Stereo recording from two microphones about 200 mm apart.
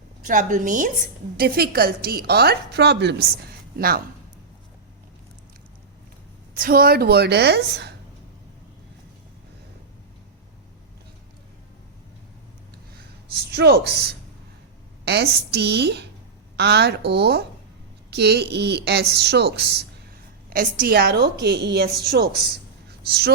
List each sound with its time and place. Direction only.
0.2 s a woman's voice: 40° right (ahead or behind)
6.6 s a woman's voice: 50° right (ahead or behind)
13.5 s a woman's voice: 55° right (ahead or behind)